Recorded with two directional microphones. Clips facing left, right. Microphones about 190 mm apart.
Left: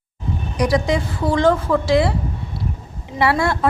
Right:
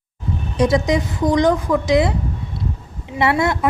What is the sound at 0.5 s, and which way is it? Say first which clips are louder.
A woman's voice: right 2 dB; 25° right (ahead or behind).